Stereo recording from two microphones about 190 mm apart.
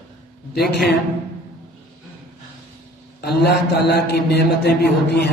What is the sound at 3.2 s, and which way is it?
A man's voice, 60° left (ahead or behind).